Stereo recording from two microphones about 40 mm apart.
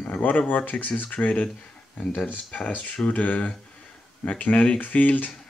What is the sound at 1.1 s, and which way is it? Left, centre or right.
Speech, left.